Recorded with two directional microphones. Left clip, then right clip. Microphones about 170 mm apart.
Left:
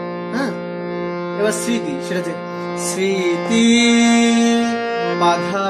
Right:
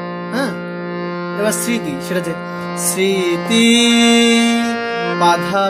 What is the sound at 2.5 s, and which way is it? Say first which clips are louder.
Music: even; 15° right (ahead or behind).